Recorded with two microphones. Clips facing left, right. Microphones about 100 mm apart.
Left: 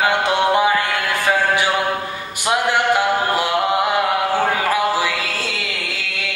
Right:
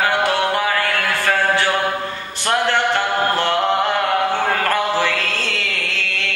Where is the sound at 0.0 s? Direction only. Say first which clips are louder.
Left 1 dB; 20° left (ahead or behind).